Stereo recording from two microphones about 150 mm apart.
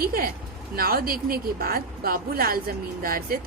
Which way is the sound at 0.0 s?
85° right.